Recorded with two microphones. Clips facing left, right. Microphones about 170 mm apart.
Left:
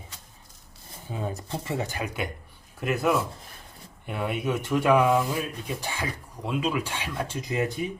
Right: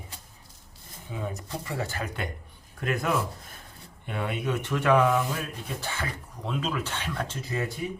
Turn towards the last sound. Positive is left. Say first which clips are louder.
# left 3 dB
turn(degrees=15)  # may be behind; listen again after turning